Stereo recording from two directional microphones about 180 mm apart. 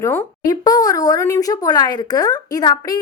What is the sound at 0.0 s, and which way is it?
A woman's voice, 15° left (ahead or behind).